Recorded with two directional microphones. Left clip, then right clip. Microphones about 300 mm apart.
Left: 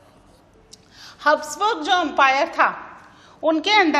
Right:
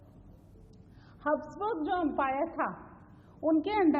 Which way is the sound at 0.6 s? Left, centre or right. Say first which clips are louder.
Left 16 dB; centre.